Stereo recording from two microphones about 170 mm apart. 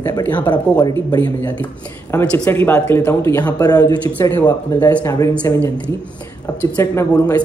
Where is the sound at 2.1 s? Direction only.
10° left (ahead or behind).